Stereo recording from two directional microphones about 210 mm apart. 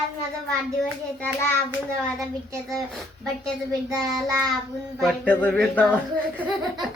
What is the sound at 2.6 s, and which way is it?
Speech, centre (ahead or behind).